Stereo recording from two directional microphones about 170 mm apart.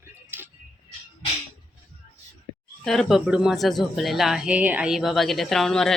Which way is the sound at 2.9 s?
Centre (ahead or behind).